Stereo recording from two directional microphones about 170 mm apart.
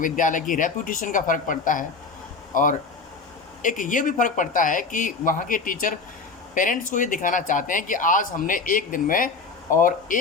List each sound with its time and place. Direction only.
0.0 s speech: 50° left (ahead or behind)
3.6 s speech: 50° left (ahead or behind)